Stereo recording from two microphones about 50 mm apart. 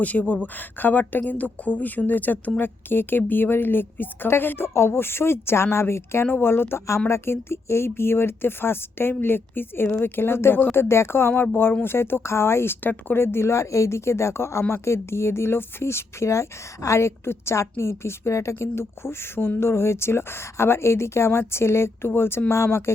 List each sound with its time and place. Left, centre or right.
0.0 s speech: left
7.1 s speech: left
12.8 s speech: left
13.1 s speech: left